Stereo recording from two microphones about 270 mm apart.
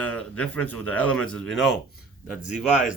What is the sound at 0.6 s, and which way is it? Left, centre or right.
Speech, left.